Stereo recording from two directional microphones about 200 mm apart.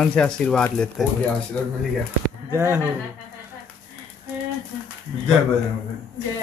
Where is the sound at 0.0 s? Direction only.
5° left (ahead or behind).